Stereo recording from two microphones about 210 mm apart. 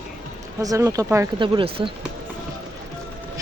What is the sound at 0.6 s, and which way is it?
Speech, 15° right (ahead or behind).